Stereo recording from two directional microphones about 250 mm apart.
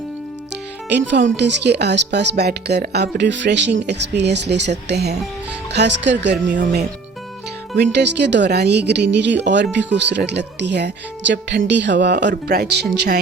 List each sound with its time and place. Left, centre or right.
0.5 s speech: right
7.8 s speech: right